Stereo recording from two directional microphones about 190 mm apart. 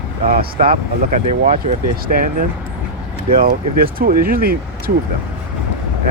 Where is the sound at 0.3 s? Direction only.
50° right (ahead or behind).